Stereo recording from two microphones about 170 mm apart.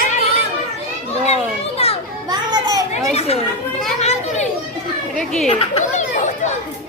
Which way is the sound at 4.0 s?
40° left (ahead or behind).